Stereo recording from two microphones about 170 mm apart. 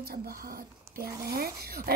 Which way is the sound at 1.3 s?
60° right (ahead or behind).